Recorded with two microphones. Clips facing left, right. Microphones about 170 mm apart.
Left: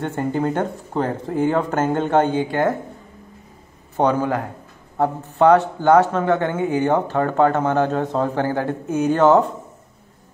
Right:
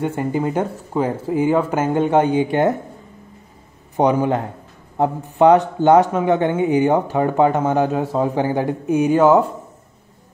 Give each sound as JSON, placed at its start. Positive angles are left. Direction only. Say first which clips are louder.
{"t": 0.0, "sound": "a man's voice", "louder": "right 1 dB", "side_deg": -10}
{"t": 3.9, "sound": "a man's voice", "louder": "right 2 dB", "side_deg": -15}